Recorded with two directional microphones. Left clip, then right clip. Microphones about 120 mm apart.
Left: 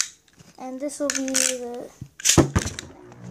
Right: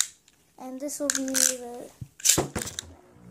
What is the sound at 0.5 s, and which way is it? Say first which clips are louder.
A child's voice: left 4 dB; 5° right (ahead or behind).